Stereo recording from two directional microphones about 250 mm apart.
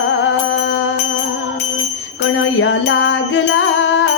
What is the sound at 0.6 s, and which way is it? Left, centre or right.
Music, left.